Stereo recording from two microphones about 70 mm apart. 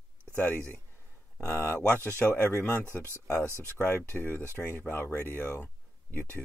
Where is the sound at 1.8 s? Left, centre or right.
Left.